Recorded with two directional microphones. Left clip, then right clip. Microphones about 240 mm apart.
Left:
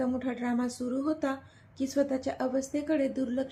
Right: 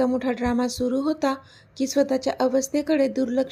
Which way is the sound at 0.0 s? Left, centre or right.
Right.